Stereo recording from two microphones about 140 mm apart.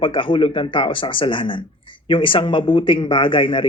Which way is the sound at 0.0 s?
35° left (ahead or behind).